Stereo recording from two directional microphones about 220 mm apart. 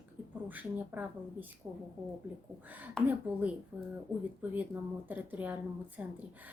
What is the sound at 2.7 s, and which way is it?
Speech, 5° right (ahead or behind).